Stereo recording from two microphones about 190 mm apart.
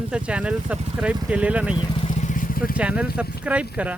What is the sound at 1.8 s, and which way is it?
Vehicle, 30° left (ahead or behind).